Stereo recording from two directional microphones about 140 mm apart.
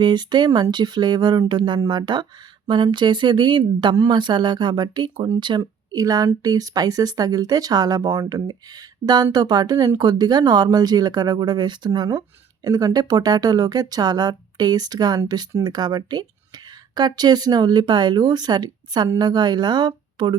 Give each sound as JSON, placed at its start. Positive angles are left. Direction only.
{"t": 0.0, "sound": "speech", "side_deg": -30}